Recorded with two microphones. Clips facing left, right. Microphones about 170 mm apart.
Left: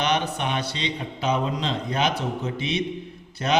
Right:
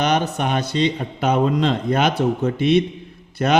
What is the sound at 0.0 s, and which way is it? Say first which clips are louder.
A man's voice: right 5 dB; 45° right (ahead or behind).